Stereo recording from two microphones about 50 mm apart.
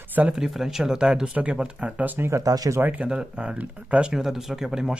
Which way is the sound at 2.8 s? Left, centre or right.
Right.